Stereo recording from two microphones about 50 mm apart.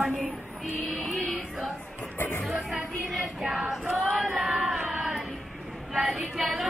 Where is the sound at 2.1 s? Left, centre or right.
Left.